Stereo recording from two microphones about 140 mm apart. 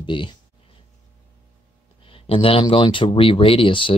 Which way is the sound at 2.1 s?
40° left (ahead or behind).